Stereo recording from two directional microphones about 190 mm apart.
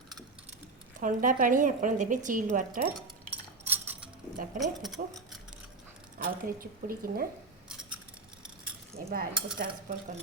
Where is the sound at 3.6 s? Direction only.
10° right (ahead or behind).